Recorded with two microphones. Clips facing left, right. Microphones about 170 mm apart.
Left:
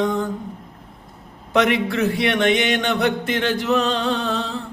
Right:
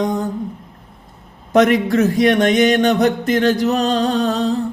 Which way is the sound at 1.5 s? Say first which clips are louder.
Right 5 dB; 45° right (ahead or behind).